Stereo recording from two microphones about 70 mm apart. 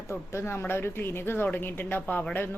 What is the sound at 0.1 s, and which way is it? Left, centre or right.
A woman's voice, left.